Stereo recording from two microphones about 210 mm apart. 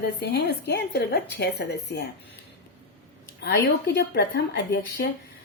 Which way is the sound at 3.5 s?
50° left (ahead or behind).